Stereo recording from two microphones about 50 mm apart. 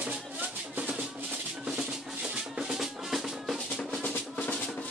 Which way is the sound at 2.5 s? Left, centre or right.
Centre.